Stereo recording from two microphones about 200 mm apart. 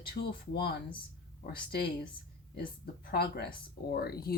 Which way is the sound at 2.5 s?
50° left (ahead or behind).